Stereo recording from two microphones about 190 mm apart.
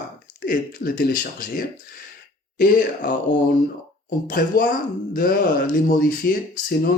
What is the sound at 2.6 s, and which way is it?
Speech, 50° left (ahead or behind).